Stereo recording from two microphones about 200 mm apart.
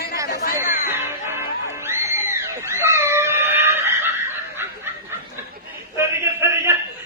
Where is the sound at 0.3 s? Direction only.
45° left (ahead or behind).